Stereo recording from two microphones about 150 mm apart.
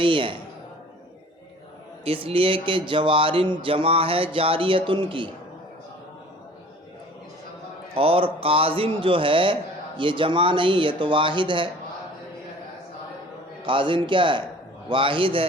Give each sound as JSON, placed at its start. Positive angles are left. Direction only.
{"t": 0.0, "sound": "a man's voice", "side_deg": -35}
{"t": 2.0, "sound": "speech", "side_deg": -40}
{"t": 7.9, "sound": "speech", "side_deg": -40}
{"t": 13.7, "sound": "speech", "side_deg": -35}